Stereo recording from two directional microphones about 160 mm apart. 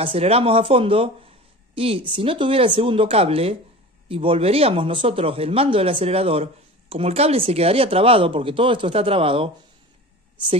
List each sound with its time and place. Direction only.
0.0 s speech: 35° right (ahead or behind)